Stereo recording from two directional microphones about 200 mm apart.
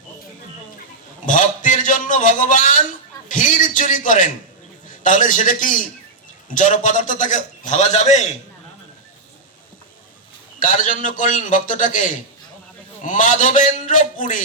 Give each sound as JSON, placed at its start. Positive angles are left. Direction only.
{"t": 1.2, "sound": "a sound", "side_deg": 40}
{"t": 3.2, "sound": "a man's voice", "side_deg": 40}
{"t": 10.6, "sound": "a man's voice", "side_deg": 40}